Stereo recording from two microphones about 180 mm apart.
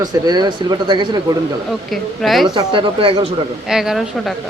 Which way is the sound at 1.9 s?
Centre (ahead or behind).